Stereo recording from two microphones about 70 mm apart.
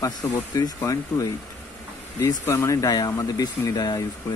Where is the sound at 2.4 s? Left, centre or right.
Left.